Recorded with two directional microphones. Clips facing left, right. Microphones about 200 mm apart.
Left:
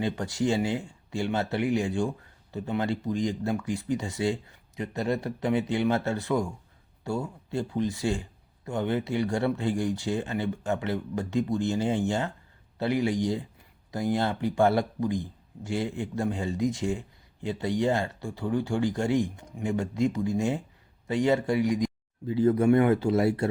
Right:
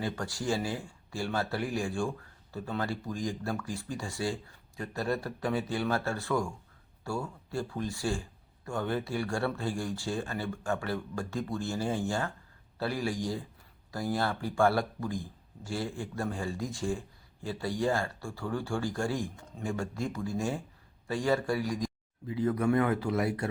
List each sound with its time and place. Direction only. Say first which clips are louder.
0.0 s speech: left 6 dB; 20° left (ahead or behind)